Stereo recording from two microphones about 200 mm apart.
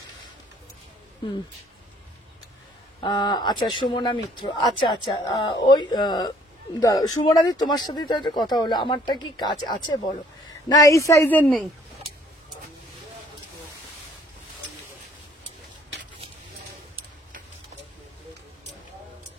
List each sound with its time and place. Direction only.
3.0 s a woman's voice: 20° left (ahead or behind)